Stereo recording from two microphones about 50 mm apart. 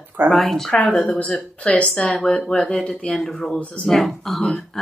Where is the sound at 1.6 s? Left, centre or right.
Left.